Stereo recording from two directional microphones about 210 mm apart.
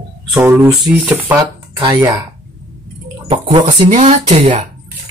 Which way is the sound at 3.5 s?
25° right (ahead or behind).